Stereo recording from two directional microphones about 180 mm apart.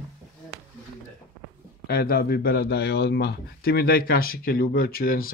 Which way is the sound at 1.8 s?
55° left (ahead or behind).